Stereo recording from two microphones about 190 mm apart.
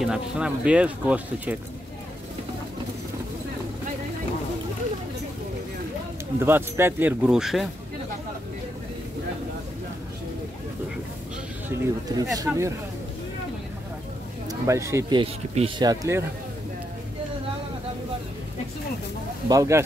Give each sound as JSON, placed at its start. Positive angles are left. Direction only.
{"t": 0.0, "sound": "speech", "side_deg": -5}
{"t": 6.4, "sound": "speech", "side_deg": -10}
{"t": 11.7, "sound": "speech", "side_deg": -15}
{"t": 14.5, "sound": "speech", "side_deg": -15}
{"t": 19.5, "sound": "speech", "side_deg": -15}